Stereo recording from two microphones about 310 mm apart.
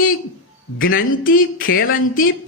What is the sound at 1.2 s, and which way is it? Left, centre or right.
Speech, left.